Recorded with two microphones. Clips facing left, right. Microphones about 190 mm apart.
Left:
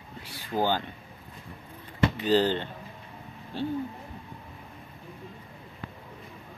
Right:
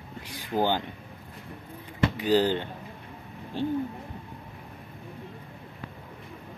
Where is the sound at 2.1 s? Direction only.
10° right (ahead or behind).